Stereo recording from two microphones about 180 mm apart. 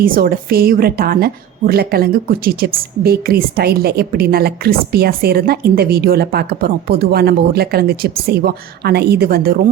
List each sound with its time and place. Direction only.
0.0 s a woman's voice: 55° right (ahead or behind)